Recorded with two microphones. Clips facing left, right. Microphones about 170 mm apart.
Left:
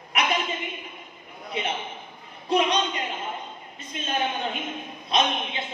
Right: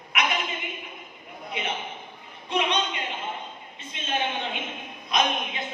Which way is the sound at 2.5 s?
35° left (ahead or behind).